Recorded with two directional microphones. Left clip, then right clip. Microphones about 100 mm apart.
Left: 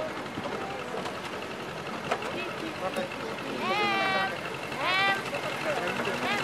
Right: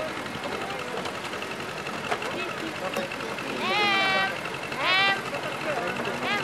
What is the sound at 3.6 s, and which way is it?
Vehicle, 20° right (ahead or behind).